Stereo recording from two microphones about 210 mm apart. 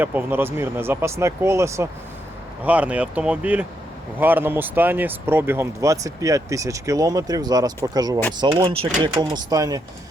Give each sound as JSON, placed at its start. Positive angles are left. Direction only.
{"t": 0.0, "sound": "speech", "side_deg": -10}
{"t": 9.5, "sound": "speech", "side_deg": -15}